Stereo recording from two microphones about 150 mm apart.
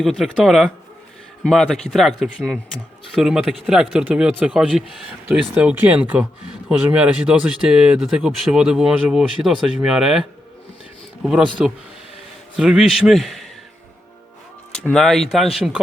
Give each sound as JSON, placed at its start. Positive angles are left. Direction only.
{"t": 0.0, "sound": "speech", "side_deg": 0}
{"t": 14.7, "sound": "speech", "side_deg": 5}